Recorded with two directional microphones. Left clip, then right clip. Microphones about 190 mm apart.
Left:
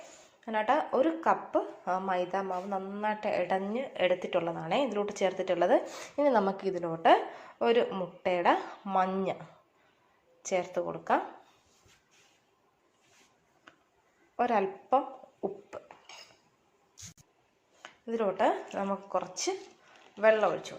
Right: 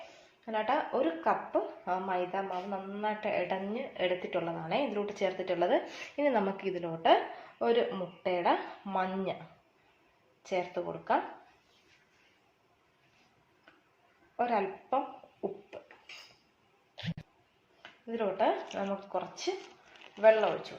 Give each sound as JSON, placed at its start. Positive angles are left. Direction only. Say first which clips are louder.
{"t": 0.4, "sound": "speech", "louder": "left 3 dB", "side_deg": 35}
{"t": 6.1, "sound": "speech", "louder": "left 3 dB", "side_deg": 5}
{"t": 6.8, "sound": "a woman's voice", "louder": "left 2 dB", "side_deg": 25}
{"t": 10.4, "sound": "speech", "louder": "left 3 dB", "side_deg": 30}
{"t": 14.3, "sound": "a sound", "louder": "left 2 dB", "side_deg": 30}
{"t": 18.0, "sound": "speech", "louder": "left 2 dB", "side_deg": 35}